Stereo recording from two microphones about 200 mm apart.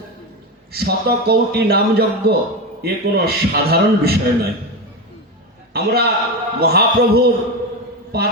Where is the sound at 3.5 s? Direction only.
50° right (ahead or behind).